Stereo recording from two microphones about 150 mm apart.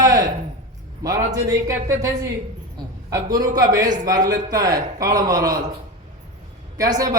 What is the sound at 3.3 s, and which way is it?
Speech, 25° right (ahead or behind).